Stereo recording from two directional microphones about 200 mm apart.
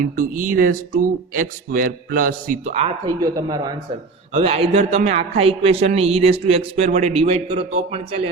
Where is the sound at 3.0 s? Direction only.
15° right (ahead or behind).